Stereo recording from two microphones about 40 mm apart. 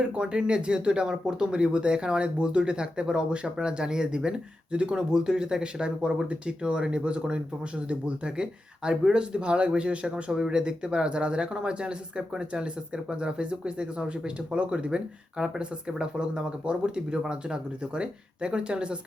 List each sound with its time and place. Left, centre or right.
0.2 s speech: right